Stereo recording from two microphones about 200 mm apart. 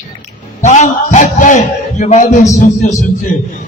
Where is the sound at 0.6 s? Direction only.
35° left (ahead or behind).